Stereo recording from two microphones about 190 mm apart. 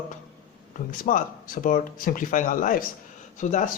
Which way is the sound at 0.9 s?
45° left (ahead or behind).